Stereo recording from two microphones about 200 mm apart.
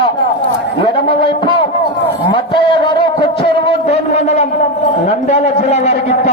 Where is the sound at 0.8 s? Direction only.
25° left (ahead or behind).